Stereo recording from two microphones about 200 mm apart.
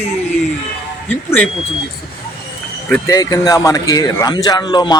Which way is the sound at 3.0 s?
15° left (ahead or behind).